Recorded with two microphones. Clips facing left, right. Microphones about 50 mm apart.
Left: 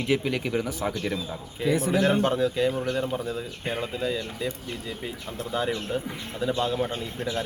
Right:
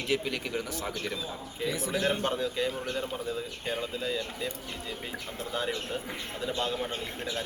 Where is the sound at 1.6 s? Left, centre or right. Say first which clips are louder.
Left 8 dB; left.